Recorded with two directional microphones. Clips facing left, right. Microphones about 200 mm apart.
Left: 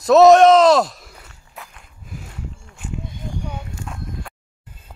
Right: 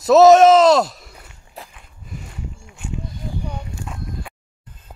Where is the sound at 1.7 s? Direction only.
Centre (ahead or behind).